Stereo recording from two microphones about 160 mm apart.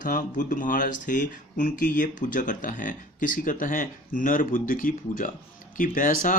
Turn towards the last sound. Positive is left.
turn(degrees=55)  # may be behind; listen again after turning